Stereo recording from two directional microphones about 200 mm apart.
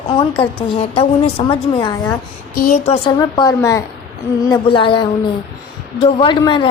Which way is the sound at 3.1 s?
20° left (ahead or behind).